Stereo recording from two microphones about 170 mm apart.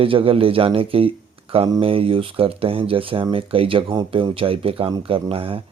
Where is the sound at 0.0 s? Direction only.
30° right (ahead or behind).